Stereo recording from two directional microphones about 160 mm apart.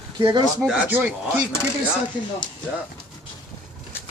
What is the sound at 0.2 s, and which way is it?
Speech, 30° right (ahead or behind).